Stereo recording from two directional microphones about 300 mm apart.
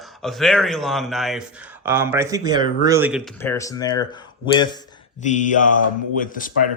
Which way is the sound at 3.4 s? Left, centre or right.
Centre.